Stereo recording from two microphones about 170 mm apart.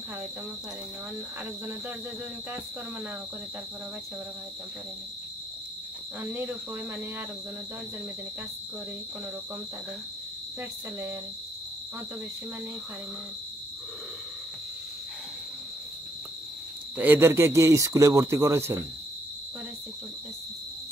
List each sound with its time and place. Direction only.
6.3 s a man's voice: 10° right (ahead or behind)
10.6 s a man's voice: 15° right (ahead or behind)
16.9 s a man's voice: 10° right (ahead or behind)